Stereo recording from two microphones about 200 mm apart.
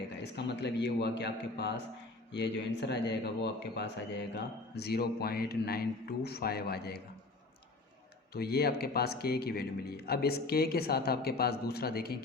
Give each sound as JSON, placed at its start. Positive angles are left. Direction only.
{"t": 0.2, "sound": "speech", "side_deg": 60}
{"t": 8.3, "sound": "speech", "side_deg": 50}